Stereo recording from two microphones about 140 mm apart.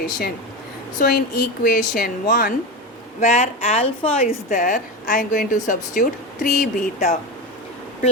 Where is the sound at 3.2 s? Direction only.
55° left (ahead or behind).